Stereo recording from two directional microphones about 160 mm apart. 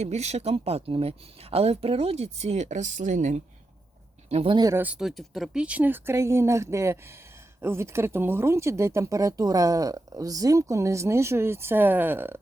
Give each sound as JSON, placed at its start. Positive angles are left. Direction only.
{"t": 0.0, "sound": "speech", "side_deg": -45}
{"t": 4.3, "sound": "speech", "side_deg": -40}
{"t": 4.5, "sound": "speech", "side_deg": -20}
{"t": 4.8, "sound": "speech", "side_deg": -5}